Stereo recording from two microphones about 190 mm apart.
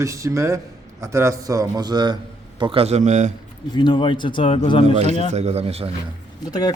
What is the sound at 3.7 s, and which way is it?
A man's voice, 25° left (ahead or behind).